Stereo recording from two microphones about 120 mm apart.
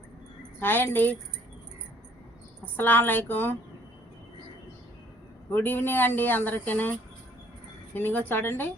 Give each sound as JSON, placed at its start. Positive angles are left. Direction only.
{"t": 0.6, "sound": "speech", "side_deg": 15}
{"t": 2.7, "sound": "speech", "side_deg": 15}
{"t": 5.5, "sound": "speech", "side_deg": 15}
{"t": 7.9, "sound": "speech", "side_deg": 15}